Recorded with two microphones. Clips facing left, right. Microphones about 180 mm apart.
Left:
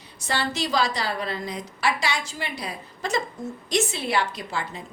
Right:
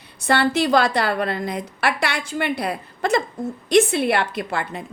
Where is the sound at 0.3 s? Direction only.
60° right (ahead or behind).